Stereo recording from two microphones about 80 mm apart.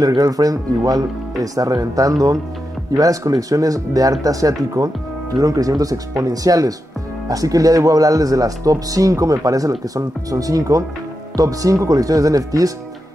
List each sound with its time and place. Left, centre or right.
0.2 s speech: right